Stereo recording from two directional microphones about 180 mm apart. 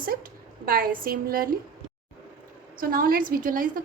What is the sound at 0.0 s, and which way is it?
A woman's voice, 55° right (ahead or behind).